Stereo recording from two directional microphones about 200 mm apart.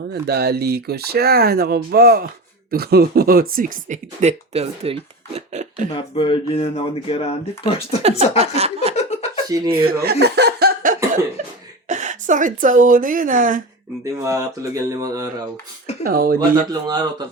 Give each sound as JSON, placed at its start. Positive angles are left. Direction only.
{"t": 0.1, "sound": "speech", "side_deg": -55}
{"t": 5.9, "sound": "speech", "side_deg": 25}
{"t": 8.4, "sound": "speech", "side_deg": -30}
{"t": 9.0, "sound": "chuckle", "side_deg": 35}
{"t": 9.7, "sound": "a sound", "side_deg": -50}
{"t": 11.4, "sound": "chuckle", "side_deg": -40}
{"t": 11.9, "sound": "a woman's voice", "side_deg": -35}
{"t": 14.0, "sound": "speech", "side_deg": -15}
{"t": 16.0, "sound": "speech", "side_deg": -45}
{"t": 16.8, "sound": "speech", "side_deg": -20}